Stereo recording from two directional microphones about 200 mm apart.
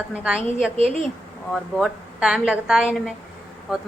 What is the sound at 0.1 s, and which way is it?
A woman's voice, 5° right (ahead or behind).